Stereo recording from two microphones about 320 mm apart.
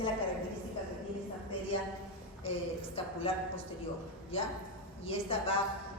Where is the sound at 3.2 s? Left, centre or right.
Centre.